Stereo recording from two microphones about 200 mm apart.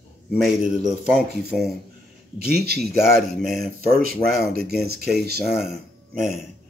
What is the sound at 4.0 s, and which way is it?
Speech, 50° right (ahead or behind).